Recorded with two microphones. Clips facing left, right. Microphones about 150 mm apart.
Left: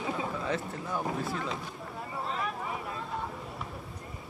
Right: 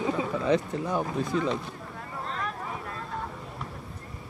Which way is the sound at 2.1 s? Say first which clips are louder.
Even; 5° left (ahead or behind).